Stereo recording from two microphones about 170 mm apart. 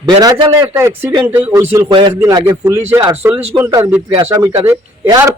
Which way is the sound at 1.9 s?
25° right (ahead or behind).